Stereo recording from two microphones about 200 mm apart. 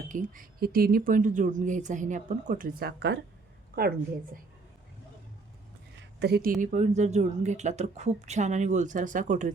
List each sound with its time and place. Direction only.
0.1 s speech: 40° right (ahead or behind)
6.0 s a sound: 55° right (ahead or behind)
6.6 s speech: 40° right (ahead or behind)